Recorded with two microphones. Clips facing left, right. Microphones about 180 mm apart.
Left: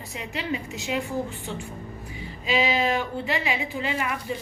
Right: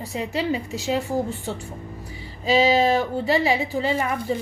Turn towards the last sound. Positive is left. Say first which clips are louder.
# right 5 dB
turn(degrees=-35)  # may be behind; listen again after turning